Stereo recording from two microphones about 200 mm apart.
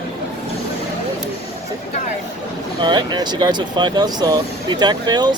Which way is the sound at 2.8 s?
20° right (ahead or behind).